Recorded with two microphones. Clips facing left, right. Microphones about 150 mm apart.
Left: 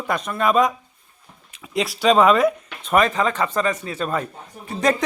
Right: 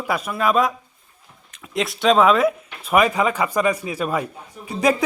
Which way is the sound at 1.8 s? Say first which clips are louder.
Even; centre (ahead or behind).